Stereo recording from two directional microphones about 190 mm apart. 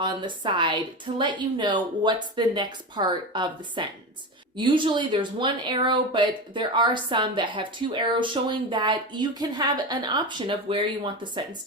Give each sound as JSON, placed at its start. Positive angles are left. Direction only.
{"t": 0.0, "sound": "speech", "side_deg": -25}